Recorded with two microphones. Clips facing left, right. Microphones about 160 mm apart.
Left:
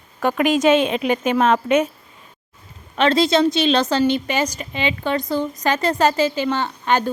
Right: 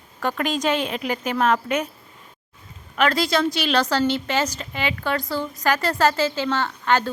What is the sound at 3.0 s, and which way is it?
A woman's voice, 25° left (ahead or behind).